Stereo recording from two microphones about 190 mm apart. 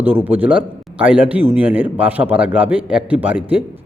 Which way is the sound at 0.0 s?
10° right (ahead or behind).